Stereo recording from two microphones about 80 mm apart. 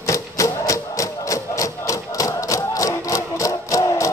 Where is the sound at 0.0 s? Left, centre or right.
Left.